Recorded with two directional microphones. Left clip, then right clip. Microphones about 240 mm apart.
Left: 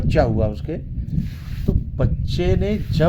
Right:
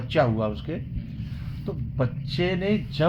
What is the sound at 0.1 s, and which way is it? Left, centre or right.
Speech, left.